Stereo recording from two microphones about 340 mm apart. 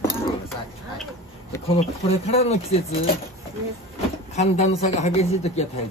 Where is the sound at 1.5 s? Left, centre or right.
Centre.